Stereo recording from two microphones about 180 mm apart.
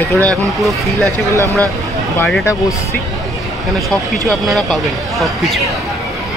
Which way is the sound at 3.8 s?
Centre (ahead or behind).